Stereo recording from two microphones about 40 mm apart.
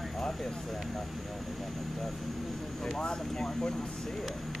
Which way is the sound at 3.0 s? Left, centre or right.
Left.